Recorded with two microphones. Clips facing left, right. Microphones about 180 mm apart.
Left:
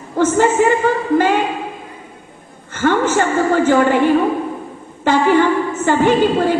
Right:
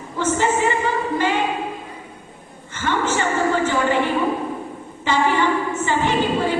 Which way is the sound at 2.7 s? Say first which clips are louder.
Left 7 dB; 50° left (ahead or behind).